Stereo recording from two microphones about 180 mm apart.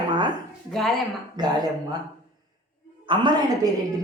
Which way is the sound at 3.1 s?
25° right (ahead or behind).